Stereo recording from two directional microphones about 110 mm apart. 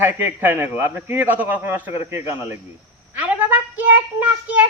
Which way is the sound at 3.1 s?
15° right (ahead or behind).